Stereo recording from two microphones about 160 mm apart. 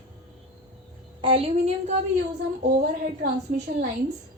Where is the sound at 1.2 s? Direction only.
35° right (ahead or behind).